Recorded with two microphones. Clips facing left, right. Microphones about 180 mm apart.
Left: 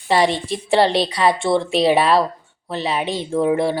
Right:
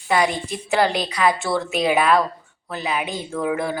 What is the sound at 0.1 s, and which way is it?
A woman's voice, 30° left (ahead or behind).